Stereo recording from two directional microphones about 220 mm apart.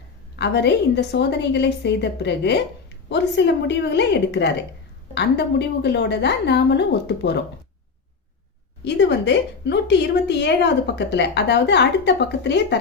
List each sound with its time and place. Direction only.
0.3 s a woman's voice: 50° left (ahead or behind)
8.8 s a woman's voice: 50° left (ahead or behind)